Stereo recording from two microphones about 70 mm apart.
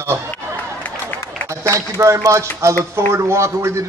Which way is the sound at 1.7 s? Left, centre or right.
Right.